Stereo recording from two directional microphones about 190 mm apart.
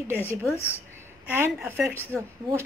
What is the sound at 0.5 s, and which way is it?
Speech, 10° left (ahead or behind).